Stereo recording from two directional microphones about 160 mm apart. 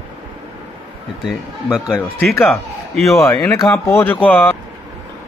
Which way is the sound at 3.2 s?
20° left (ahead or behind).